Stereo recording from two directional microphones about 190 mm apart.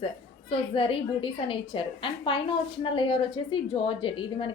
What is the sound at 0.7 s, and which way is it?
A woman's voice, 30° left (ahead or behind).